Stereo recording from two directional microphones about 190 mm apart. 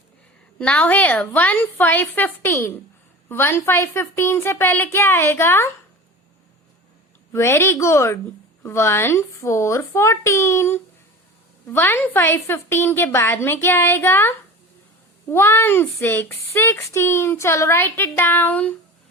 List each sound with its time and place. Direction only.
0.6 s speech: 10° left (ahead or behind)
7.3 s speech: 15° left (ahead or behind)